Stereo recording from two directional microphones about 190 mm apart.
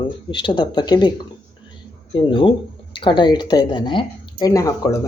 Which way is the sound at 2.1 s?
25° left (ahead or behind).